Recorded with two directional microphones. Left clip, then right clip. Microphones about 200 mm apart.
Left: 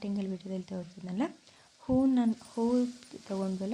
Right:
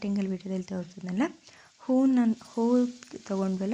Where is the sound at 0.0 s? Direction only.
15° right (ahead or behind).